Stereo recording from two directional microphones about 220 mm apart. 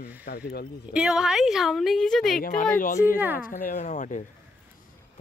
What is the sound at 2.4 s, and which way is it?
Speech, 35° left (ahead or behind).